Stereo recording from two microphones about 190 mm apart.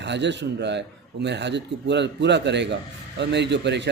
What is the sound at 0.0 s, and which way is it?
A man's voice, 65° right (ahead or behind).